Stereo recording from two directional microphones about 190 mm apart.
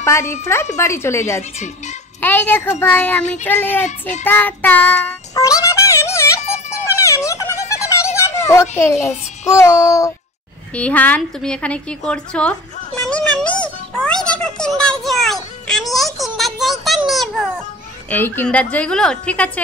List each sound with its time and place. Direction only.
0.0 s a woman's voice: 15° left (ahead or behind)
4.2 s child singing: 10° left (ahead or behind)
7.0 s a sound: 15° left (ahead or behind)
8.5 s a woman's voice: 15° left (ahead or behind)
13.1 s music: 5° left (ahead or behind)
16.8 s a sound: centre (ahead or behind)
18.1 s a woman's voice: 10° left (ahead or behind)